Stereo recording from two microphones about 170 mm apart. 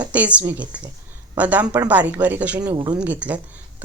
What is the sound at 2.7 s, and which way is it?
Speech, 25° right (ahead or behind).